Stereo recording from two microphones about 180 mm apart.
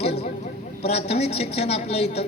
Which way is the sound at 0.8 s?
35° left (ahead or behind).